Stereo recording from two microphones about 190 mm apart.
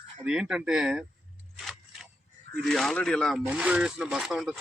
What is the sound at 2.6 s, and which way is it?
Speech, centre (ahead or behind).